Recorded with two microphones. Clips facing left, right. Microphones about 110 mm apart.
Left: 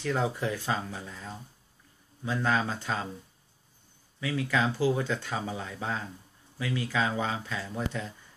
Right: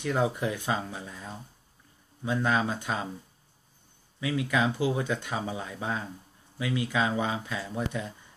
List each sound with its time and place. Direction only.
0.0 s speech: 15° right (ahead or behind)
4.2 s speech: 15° right (ahead or behind)